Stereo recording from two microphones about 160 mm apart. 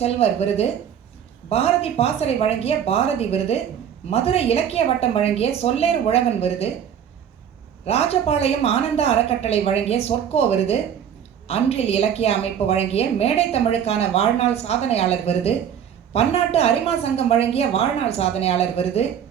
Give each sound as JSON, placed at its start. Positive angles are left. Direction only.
{"t": 0.0, "sound": "a woman's voice", "side_deg": 40}
{"t": 7.9, "sound": "a woman's voice", "side_deg": 40}